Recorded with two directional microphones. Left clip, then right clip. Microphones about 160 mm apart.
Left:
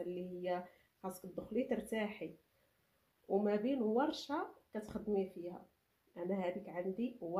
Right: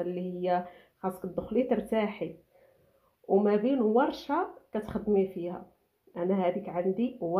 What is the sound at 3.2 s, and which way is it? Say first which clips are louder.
A woman's voice: right 10 dB; 15° right (ahead or behind).